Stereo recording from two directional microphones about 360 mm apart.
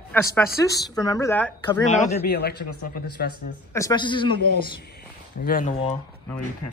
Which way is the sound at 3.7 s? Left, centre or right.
Centre.